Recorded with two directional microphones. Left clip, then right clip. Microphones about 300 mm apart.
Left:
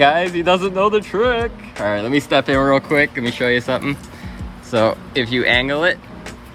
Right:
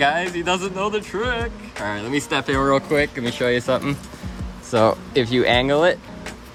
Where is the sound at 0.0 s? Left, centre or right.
Centre.